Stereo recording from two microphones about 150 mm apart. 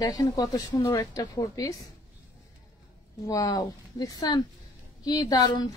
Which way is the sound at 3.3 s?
25° left (ahead or behind).